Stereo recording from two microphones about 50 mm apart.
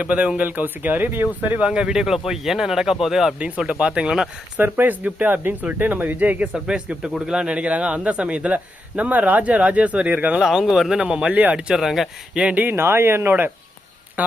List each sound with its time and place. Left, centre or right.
0.0 s speech: right
1.6 s speech: centre
3.3 s a man's voice: right
4.6 s speech: right
6.5 s a man's voice: centre
10.4 s speech: centre
11.0 s a man's voice: right
12.7 s speech: right
14.2 s speech: right